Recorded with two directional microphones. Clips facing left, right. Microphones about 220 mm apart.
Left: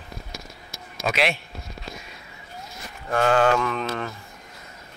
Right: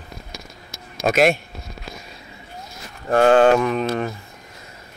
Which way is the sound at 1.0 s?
45° right (ahead or behind).